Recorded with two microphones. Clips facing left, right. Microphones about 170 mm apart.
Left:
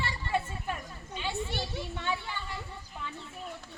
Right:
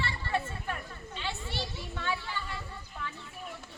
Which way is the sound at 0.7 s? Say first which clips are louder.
Left 1 dB; 15° left (ahead or behind).